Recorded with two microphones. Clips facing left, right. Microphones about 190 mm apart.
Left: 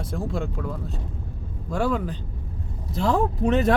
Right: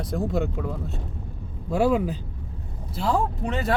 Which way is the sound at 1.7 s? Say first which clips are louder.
Right 3 dB; 5° right (ahead or behind).